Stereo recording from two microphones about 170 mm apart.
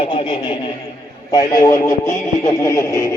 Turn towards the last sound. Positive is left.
turn(degrees=15)  # may be behind; listen again after turning